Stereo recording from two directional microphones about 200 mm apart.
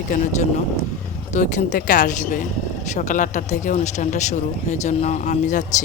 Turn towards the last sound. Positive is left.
turn(degrees=40)  # may be behind; listen again after turning